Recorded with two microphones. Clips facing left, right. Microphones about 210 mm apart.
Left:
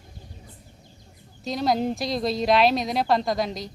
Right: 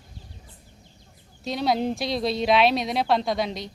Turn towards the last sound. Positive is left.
turn(degrees=0)  # may be behind; listen again after turning